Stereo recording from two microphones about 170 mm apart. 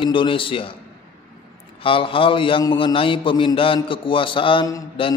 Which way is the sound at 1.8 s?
30° left (ahead or behind).